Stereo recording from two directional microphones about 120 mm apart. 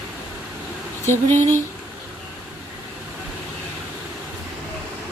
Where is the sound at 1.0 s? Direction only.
20° left (ahead or behind).